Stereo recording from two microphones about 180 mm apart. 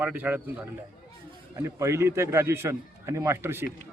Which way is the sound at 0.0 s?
10° right (ahead or behind).